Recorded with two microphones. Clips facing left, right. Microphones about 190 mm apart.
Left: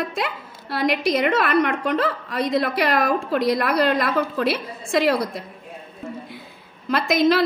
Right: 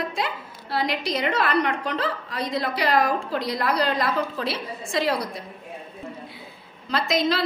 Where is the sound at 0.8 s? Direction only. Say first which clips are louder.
Left 7 dB; 55° left (ahead or behind).